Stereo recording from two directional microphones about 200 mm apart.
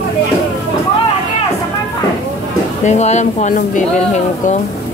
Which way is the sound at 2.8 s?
35° left (ahead or behind).